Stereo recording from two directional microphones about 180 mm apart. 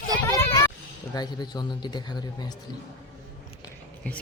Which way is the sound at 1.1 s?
25° left (ahead or behind).